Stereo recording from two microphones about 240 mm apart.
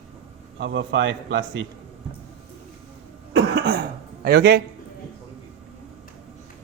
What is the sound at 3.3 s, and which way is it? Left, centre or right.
Cough, right.